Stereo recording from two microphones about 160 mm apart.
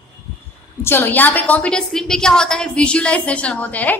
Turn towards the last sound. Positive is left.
turn(degrees=10)  # may be behind; listen again after turning